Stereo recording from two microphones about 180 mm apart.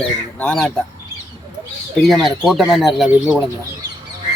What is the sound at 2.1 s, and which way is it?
Speech, centre (ahead or behind).